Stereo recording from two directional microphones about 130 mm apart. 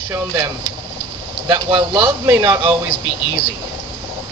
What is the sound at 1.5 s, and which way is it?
Speech, 40° right (ahead or behind).